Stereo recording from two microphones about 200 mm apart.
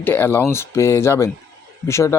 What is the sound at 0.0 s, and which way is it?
Speech, 10° left (ahead or behind).